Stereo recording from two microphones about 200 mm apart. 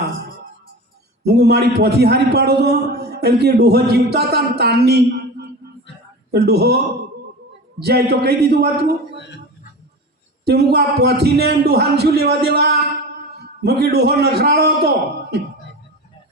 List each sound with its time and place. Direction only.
1.2 s a man's voice: 50° right (ahead or behind)
10.4 s a man's voice: 55° right (ahead or behind)